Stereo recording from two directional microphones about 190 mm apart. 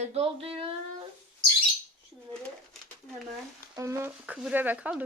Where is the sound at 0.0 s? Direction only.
30° right (ahead or behind).